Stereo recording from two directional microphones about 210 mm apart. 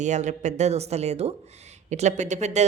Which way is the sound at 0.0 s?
35° right (ahead or behind).